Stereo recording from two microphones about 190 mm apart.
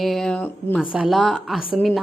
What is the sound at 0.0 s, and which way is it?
Speech, centre (ahead or behind).